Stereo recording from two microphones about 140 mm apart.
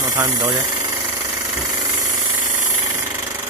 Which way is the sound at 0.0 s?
30° right (ahead or behind).